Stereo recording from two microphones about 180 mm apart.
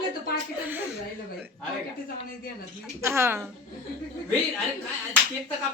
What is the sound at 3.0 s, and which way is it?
Speech, 15° right (ahead or behind).